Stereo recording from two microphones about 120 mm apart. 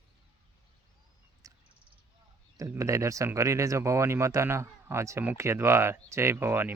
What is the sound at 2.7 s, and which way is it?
Speech, 25° right (ahead or behind).